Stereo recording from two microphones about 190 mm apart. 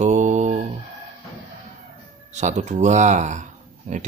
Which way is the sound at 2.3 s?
40° right (ahead or behind).